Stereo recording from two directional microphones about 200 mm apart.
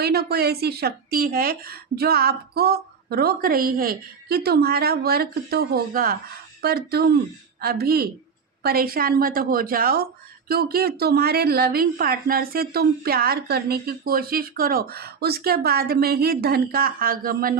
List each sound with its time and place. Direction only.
0.0 s a woman's voice: 50° right (ahead or behind)